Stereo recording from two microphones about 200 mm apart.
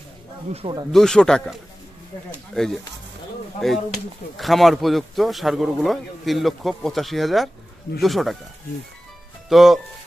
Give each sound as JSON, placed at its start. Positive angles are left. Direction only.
{"t": 0.5, "sound": "speech", "side_deg": -30}
{"t": 0.9, "sound": "speech", "side_deg": 5}
{"t": 9.5, "sound": "speech", "side_deg": 0}